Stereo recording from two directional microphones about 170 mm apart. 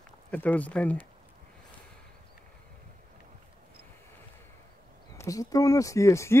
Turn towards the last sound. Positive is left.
turn(degrees=15)  # may be behind; listen again after turning